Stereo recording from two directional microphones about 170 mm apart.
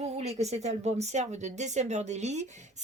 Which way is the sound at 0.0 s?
40° right (ahead or behind).